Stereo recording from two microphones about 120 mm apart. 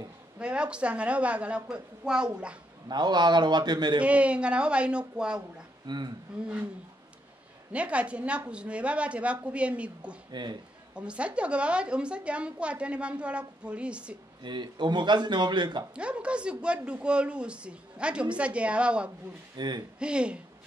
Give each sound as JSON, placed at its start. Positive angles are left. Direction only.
{"t": 0.4, "sound": "a woman's voice", "side_deg": -10}
{"t": 2.9, "sound": "speech", "side_deg": -35}
{"t": 4.0, "sound": "a woman's voice", "side_deg": -10}
{"t": 5.9, "sound": "speech", "side_deg": -35}
{"t": 7.7, "sound": "a woman's voice", "side_deg": -10}
{"t": 10.3, "sound": "speech", "side_deg": -40}
{"t": 11.0, "sound": "a woman's voice", "side_deg": -10}
{"t": 14.4, "sound": "speech", "side_deg": -40}
{"t": 15.9, "sound": "a woman's voice", "side_deg": -10}
{"t": 19.5, "sound": "speech", "side_deg": -35}
{"t": 20.0, "sound": "a woman's voice", "side_deg": -10}